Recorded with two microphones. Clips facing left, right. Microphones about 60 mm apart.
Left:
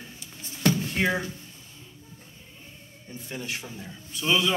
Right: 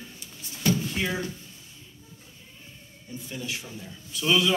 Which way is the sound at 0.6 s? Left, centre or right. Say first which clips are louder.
Left 2 dB; left.